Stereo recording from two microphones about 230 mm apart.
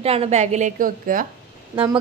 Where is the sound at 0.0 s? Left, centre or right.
Right.